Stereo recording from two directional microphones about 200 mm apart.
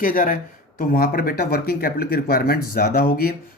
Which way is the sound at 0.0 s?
45° left (ahead or behind).